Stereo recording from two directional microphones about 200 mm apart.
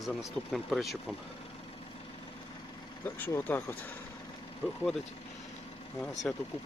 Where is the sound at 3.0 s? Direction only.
10° left (ahead or behind).